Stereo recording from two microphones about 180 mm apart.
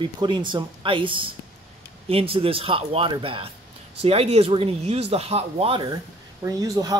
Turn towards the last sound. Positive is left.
turn(degrees=-20)  # may be behind; listen again after turning